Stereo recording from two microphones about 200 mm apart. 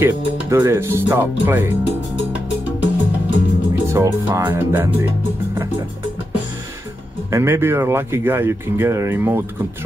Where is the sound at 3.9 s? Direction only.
15° right (ahead or behind).